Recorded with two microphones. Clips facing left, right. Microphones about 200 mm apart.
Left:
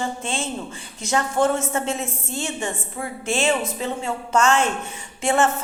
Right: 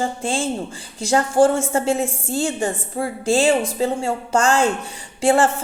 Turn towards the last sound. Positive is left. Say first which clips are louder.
# right 4 dB
turn(degrees=-30)  # may be behind; listen again after turning